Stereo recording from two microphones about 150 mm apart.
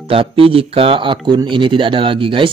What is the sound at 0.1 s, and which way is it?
Speech, 40° right (ahead or behind).